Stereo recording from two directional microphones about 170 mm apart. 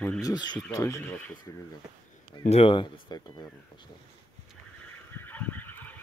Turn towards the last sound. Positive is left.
turn(degrees=10)  # may be behind; listen again after turning